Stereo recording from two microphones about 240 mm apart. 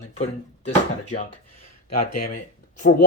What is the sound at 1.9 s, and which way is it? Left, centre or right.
Speech, left.